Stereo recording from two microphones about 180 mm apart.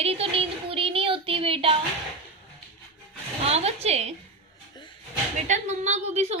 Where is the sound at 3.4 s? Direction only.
35° right (ahead or behind).